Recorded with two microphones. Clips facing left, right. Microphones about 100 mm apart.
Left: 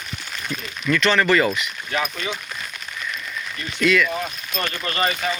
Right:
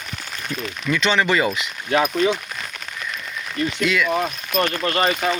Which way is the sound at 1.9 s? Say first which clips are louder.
Right 7 dB; 60° right (ahead or behind).